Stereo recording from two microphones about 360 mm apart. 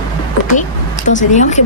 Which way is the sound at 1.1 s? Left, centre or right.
Centre.